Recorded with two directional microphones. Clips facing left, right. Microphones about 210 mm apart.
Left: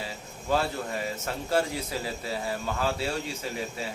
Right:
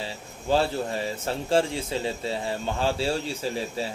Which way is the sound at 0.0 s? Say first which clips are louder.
Right 3 dB; 30° right (ahead or behind).